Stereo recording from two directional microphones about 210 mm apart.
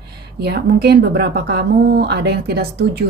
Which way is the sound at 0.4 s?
50° right (ahead or behind).